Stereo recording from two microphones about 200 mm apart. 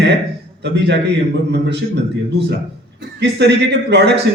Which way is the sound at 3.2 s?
60° right (ahead or behind).